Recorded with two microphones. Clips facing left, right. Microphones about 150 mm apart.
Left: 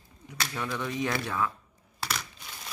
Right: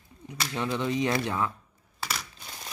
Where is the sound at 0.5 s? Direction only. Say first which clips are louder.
Right 5 dB; 20° right (ahead or behind).